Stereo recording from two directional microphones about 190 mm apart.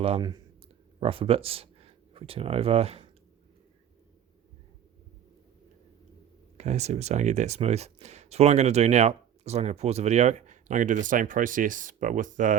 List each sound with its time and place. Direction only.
0.2 s speech: 20° right (ahead or behind)
6.6 s speech: 35° right (ahead or behind)